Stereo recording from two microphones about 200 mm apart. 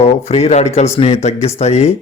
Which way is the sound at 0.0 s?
30° left (ahead or behind).